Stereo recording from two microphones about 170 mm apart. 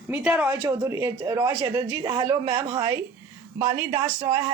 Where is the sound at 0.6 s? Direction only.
15° right (ahead or behind).